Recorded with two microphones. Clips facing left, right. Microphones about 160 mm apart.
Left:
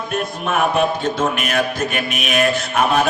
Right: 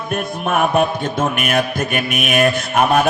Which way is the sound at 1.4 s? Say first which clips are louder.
Right 1 dB; 50° right (ahead or behind).